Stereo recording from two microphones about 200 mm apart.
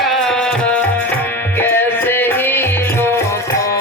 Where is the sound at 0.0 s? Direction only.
Centre (ahead or behind).